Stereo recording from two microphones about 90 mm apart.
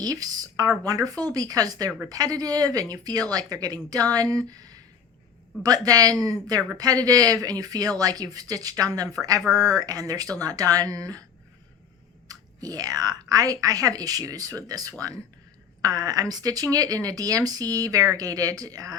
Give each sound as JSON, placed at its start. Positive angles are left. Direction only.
{"t": 0.0, "sound": "speech", "side_deg": -45}
{"t": 12.3, "sound": "speech", "side_deg": -45}